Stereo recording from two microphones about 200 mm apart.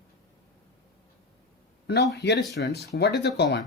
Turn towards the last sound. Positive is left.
turn(degrees=55)  # may be behind; listen again after turning